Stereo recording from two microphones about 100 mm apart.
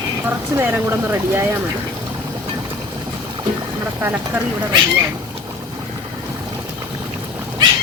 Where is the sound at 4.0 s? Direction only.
20° right (ahead or behind).